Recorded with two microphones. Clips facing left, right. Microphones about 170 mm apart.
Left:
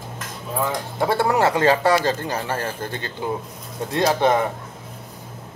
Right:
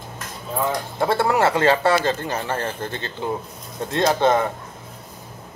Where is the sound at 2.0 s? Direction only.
20° right (ahead or behind).